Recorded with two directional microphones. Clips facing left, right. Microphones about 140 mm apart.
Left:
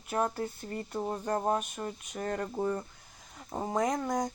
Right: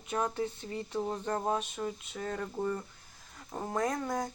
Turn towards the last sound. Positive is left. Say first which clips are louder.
# left 2 dB
turn(degrees=15)  # may be behind; listen again after turning